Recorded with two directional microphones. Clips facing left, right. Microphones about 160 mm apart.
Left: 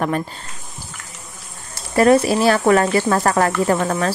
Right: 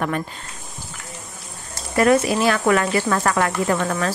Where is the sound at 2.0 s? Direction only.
30° left (ahead or behind).